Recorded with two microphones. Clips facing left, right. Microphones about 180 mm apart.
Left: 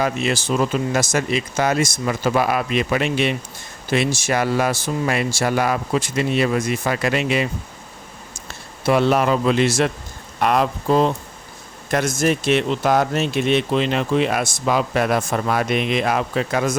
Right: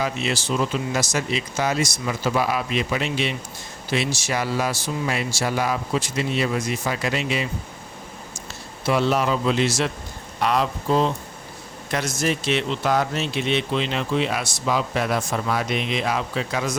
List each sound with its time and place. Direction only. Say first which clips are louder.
0.0 s speech: left 4 dB; 50° left (ahead or behind)
8.9 s speech: left 4 dB; 55° left (ahead or behind)